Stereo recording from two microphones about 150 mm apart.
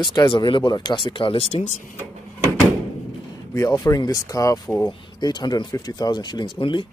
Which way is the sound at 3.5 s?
20° left (ahead or behind).